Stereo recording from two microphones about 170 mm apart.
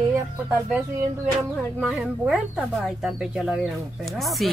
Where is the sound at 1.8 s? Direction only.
Centre (ahead or behind).